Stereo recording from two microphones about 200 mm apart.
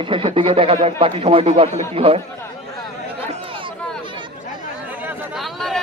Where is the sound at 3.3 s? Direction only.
25° right (ahead or behind).